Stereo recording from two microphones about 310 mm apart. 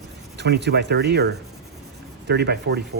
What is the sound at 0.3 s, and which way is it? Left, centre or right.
Speech, right.